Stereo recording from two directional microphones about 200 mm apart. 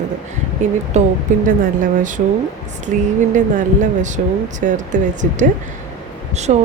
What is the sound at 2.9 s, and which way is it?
Speech, 40° right (ahead or behind).